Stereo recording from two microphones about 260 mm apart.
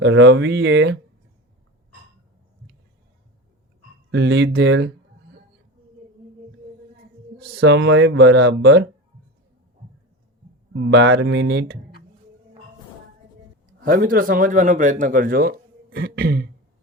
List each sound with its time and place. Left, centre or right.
0.0 s speech: right
4.1 s speech: right
7.3 s speech: right
10.8 s a man's voice: right
13.8 s a man's voice: right